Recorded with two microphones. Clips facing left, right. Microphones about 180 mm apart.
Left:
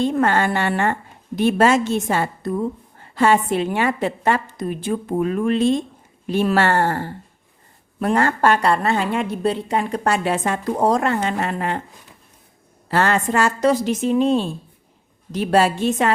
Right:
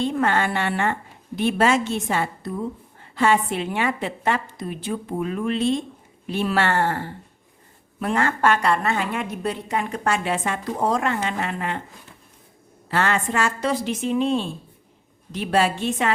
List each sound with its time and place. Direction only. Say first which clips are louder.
0.0 s a woman's voice: left 3 dB; 45° left (ahead or behind)
12.9 s a woman's voice: left 4 dB; 40° left (ahead or behind)